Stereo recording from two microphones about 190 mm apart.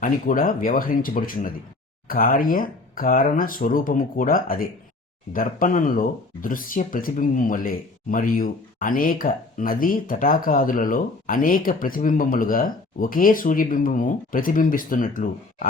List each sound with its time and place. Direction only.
0.0 s speech: 45° left (ahead or behind)